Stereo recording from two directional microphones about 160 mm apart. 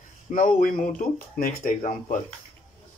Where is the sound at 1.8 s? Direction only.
50° left (ahead or behind).